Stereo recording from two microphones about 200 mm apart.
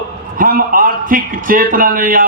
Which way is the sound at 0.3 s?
45° right (ahead or behind).